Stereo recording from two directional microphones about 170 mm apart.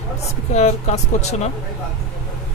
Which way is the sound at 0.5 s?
40° left (ahead or behind).